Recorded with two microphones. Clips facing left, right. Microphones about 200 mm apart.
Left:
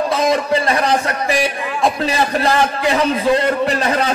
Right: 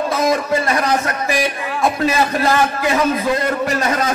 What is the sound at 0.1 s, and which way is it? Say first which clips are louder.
A man's voice: even; 30° left (ahead or behind).